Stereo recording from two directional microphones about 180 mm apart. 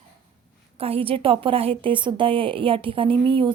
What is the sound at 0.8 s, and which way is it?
A woman's voice, 30° right (ahead or behind).